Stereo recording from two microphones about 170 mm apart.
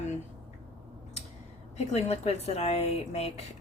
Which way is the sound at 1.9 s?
40° left (ahead or behind).